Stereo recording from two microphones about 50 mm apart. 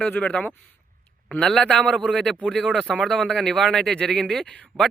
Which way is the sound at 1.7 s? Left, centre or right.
Centre.